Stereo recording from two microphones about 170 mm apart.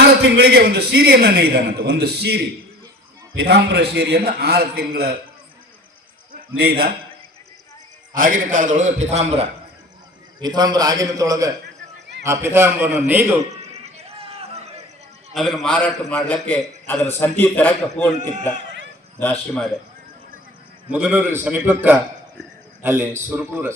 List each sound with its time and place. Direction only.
0.2 s a man's voice: 75° right (ahead or behind)
6.3 s a man's voice: 70° right (ahead or behind)
8.1 s a man's voice: 50° right (ahead or behind)
10.4 s a man's voice: 25° right (ahead or behind)
14.2 s a sound: 35° right (ahead or behind)
15.3 s a man's voice: centre (ahead or behind)
19.2 s a man's voice: 10° left (ahead or behind)
20.9 s a man's voice: 5° right (ahead or behind)